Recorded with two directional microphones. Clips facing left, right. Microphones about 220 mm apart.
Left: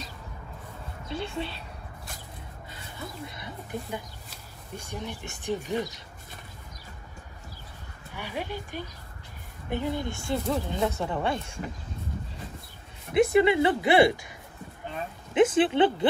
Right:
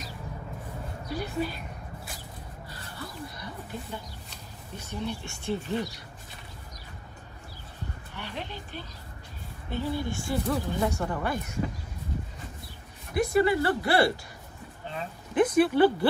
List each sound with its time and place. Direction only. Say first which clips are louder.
1.0 s speech: right 2 dB; 25° left (ahead or behind)
2.7 s a sound: left 1 dB; 20° left (ahead or behind)
4.7 s speech: right 2 dB; 15° left (ahead or behind)
8.1 s speech: left 5 dB; 10° left (ahead or behind); by 11.6 s 25° left (ahead or behind)
13.1 s speech: left 3 dB; 20° left (ahead or behind)
15.3 s speech: left 1 dB; 20° left (ahead or behind)